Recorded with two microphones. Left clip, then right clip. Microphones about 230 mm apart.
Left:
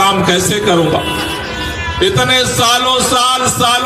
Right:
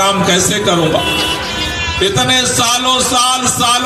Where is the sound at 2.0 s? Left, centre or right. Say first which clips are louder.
Left 2 dB; right.